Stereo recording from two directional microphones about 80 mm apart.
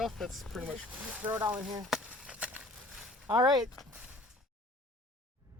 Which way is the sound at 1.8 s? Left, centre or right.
Centre.